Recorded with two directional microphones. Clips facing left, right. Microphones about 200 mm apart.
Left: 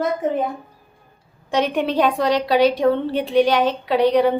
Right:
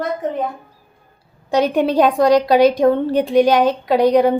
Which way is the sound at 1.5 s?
40° right (ahead or behind).